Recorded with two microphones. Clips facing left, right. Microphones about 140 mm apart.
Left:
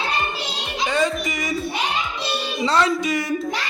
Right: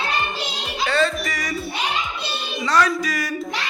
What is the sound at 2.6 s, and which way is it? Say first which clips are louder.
Music: even; 25° left (ahead or behind).